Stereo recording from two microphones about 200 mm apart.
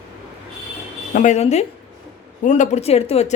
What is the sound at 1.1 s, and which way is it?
Speech, 35° left (ahead or behind).